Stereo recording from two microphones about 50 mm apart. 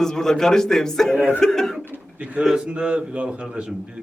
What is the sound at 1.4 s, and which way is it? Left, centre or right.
Chuckle, centre.